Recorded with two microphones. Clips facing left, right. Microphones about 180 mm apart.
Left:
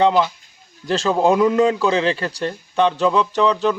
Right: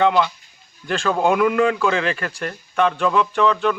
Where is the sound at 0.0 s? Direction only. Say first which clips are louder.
Left 1 dB; 30° left (ahead or behind).